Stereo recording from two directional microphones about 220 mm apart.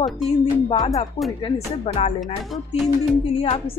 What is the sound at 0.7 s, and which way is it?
A woman's voice, 30° left (ahead or behind).